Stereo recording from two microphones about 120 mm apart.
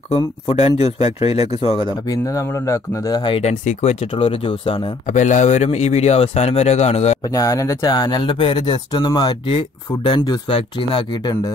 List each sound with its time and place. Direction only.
0.5 s speech: 60° left (ahead or behind)
2.0 s speech: 30° left (ahead or behind)
3.2 s speech: 45° left (ahead or behind)
3.4 s speech: 65° left (ahead or behind)
4.1 s speech: 50° left (ahead or behind)
5.0 s speech: 90° left; by 7.2 s 65° left (ahead or behind)
7.2 s speech: 30° left (ahead or behind)
9.5 s speech: 50° left (ahead or behind)